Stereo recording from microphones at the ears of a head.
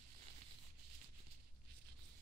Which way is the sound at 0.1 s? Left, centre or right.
Right.